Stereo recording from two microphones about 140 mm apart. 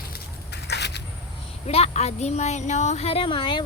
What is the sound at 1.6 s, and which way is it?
Speech, 50° left (ahead or behind).